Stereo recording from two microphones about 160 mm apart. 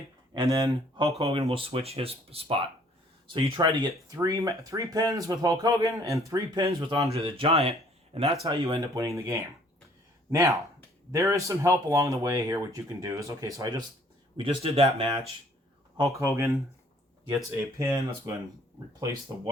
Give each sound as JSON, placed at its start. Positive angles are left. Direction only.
{"t": 0.3, "sound": "speech", "side_deg": -25}
{"t": 7.1, "sound": "speech", "side_deg": -35}
{"t": 14.3, "sound": "speech", "side_deg": -35}
{"t": 16.0, "sound": "speech", "side_deg": -20}
{"t": 17.7, "sound": "speech", "side_deg": -15}